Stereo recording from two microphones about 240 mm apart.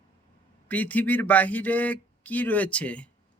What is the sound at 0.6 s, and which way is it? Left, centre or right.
Speech, centre.